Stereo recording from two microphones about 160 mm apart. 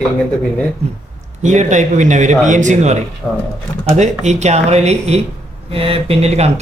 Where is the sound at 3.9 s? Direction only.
45° right (ahead or behind).